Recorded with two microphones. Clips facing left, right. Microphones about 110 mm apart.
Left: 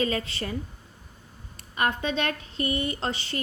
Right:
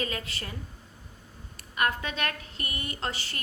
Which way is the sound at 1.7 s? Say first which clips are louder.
Left 3 dB; 25° left (ahead or behind).